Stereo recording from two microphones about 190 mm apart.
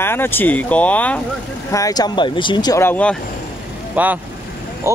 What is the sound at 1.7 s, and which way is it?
Speech, 20° left (ahead or behind).